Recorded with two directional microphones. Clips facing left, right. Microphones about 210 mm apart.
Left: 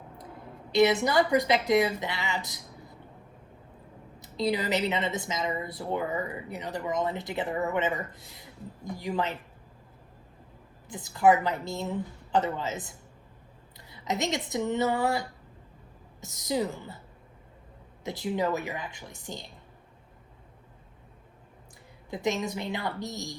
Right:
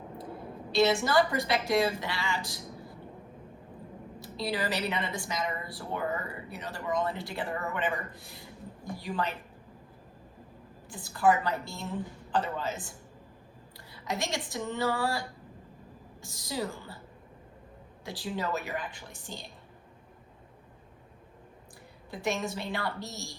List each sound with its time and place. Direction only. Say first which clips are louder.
0.7 s a woman's voice: left 2 dB; 20° left (ahead or behind)
4.2 s a woman's voice: left 4 dB; 20° left (ahead or behind)
10.8 s a woman's voice: left 3 dB; 20° left (ahead or behind)
16.2 s a woman's voice: left 5 dB; 20° left (ahead or behind)
18.0 s a woman's voice: left 5 dB; 20° left (ahead or behind)
22.1 s a woman's voice: left 3 dB; 20° left (ahead or behind)